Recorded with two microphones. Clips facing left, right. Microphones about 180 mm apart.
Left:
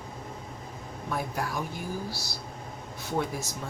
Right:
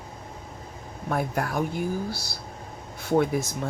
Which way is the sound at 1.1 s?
55° right (ahead or behind).